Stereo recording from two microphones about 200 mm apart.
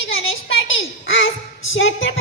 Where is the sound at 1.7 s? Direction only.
70° left (ahead or behind).